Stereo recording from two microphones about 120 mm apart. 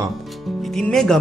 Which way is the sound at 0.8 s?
5° left (ahead or behind).